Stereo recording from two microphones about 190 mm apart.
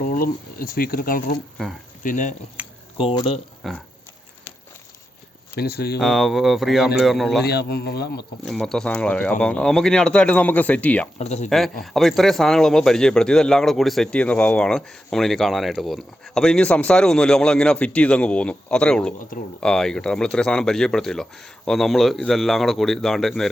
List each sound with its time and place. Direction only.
0.0 s speech: 50° left (ahead or behind)
2.6 s a sound: 10° right (ahead or behind)
3.0 s speech: 30° left (ahead or behind)
3.6 s speech: centre (ahead or behind)
5.5 s speech: 55° left (ahead or behind)
6.0 s speech: centre (ahead or behind)
7.4 s speech: 55° left (ahead or behind)
8.4 s speech: centre (ahead or behind)
11.2 s speech: 35° left (ahead or behind)
11.4 s speech: centre (ahead or behind)